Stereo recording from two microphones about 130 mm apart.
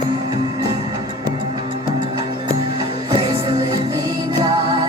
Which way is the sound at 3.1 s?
40° right (ahead or behind).